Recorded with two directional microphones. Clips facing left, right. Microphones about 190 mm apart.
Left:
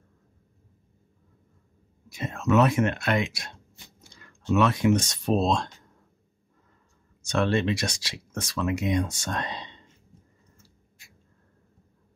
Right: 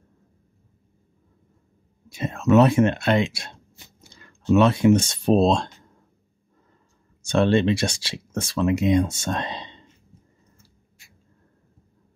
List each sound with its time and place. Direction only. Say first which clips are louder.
2.0 s speech: right 5 dB; 25° right (ahead or behind)
7.2 s speech: right 6 dB; 30° right (ahead or behind)